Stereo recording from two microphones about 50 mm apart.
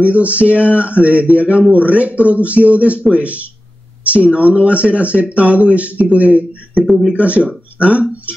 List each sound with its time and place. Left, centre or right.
0.0 s speech: right